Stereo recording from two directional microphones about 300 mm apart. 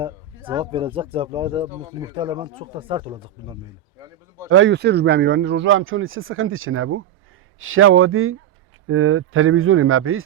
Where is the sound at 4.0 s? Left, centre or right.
Centre.